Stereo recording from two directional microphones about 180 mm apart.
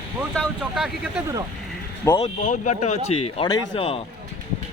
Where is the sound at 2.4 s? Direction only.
45° left (ahead or behind).